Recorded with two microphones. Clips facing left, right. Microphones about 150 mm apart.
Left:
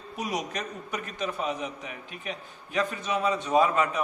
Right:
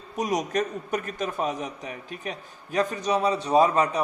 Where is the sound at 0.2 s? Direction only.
45° right (ahead or behind).